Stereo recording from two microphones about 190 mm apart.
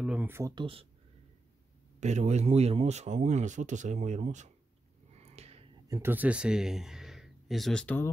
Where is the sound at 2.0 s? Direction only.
40° right (ahead or behind).